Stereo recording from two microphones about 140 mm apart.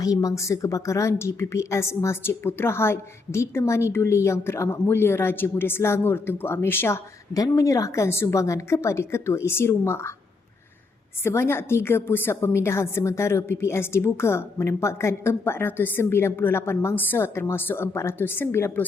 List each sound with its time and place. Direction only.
0.0 s a woman's voice: 25° left (ahead or behind)
11.2 s a woman's voice: 20° left (ahead or behind)